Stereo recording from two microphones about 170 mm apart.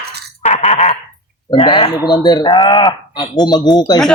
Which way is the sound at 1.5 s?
30° left (ahead or behind).